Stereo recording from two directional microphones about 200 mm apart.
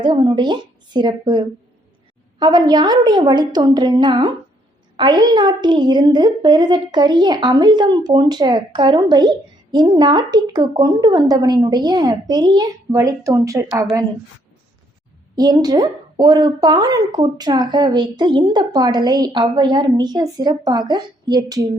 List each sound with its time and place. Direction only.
0.0 s a woman's voice: 20° right (ahead or behind)
15.4 s a woman's voice: 20° right (ahead or behind)